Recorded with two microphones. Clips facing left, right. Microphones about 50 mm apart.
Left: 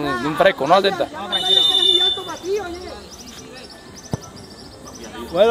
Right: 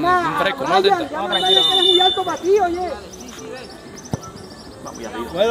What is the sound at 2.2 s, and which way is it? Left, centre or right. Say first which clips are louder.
Speech: right 7 dB; right.